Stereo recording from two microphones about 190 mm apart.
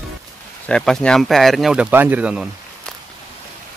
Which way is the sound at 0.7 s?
5° left (ahead or behind).